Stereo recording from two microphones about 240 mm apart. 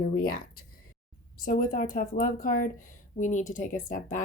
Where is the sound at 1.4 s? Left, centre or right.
Left.